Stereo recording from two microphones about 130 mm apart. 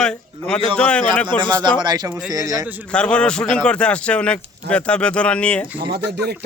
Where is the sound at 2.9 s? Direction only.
5° left (ahead or behind).